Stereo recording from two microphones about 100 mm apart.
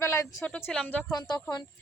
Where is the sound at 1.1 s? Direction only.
45° left (ahead or behind).